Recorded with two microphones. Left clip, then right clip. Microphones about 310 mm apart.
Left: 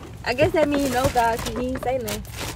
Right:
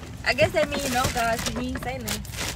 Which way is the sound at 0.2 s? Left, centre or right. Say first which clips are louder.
Left 2 dB; left.